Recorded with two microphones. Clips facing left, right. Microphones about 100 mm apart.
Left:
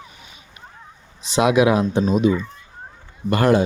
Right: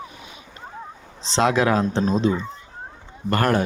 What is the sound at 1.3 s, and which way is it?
Speech, 15° left (ahead or behind).